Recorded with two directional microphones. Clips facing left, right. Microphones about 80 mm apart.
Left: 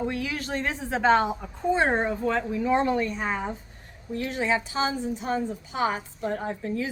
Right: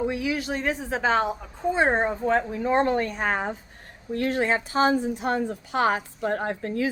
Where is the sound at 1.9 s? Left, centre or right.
Right.